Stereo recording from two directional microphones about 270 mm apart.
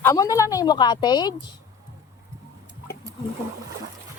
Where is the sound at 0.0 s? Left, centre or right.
Centre.